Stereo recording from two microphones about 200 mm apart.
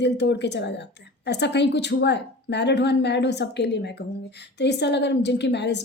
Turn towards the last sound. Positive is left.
turn(degrees=60)  # may be behind; listen again after turning